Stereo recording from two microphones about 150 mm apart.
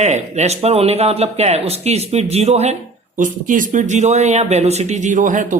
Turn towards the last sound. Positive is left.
turn(degrees=-60)  # may be behind; listen again after turning